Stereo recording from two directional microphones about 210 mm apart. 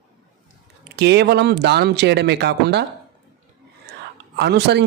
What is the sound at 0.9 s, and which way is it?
Speech, 55° right (ahead or behind).